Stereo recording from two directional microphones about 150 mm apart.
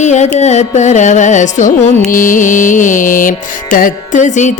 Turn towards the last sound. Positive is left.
turn(degrees=55)  # may be behind; listen again after turning